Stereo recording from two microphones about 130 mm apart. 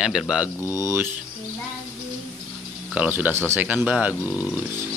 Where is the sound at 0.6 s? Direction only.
25° left (ahead or behind).